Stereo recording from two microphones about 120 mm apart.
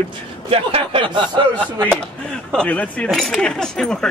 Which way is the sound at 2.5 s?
10° left (ahead or behind).